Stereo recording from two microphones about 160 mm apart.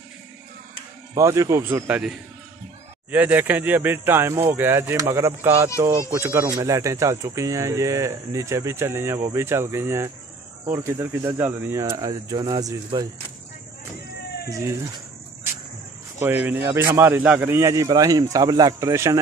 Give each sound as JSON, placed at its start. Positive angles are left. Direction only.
{"t": 1.1, "sound": "speech", "side_deg": -20}
{"t": 16.2, "sound": "speech", "side_deg": -10}